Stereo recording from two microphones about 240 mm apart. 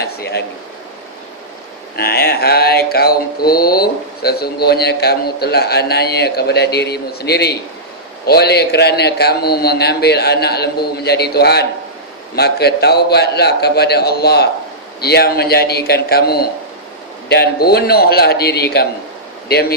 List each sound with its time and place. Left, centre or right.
0.0 s a sound: left
2.0 s mantra: left
8.3 s a man's voice: left
15.0 s mantra: left